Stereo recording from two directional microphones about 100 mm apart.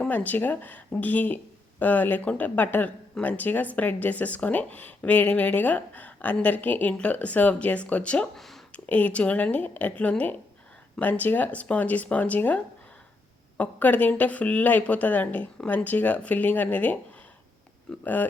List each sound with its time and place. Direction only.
0.0 s speech: 15° left (ahead or behind)
13.6 s speech: 15° left (ahead or behind)
18.0 s speech: 15° left (ahead or behind)